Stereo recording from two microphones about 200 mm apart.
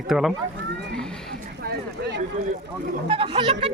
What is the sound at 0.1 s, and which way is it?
Speech, centre (ahead or behind).